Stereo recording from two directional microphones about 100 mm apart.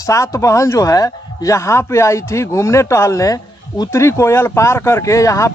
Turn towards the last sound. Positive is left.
turn(degrees=30)  # may be behind; listen again after turning